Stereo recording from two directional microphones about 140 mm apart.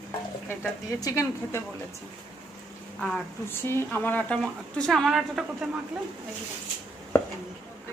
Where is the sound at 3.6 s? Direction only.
15° left (ahead or behind).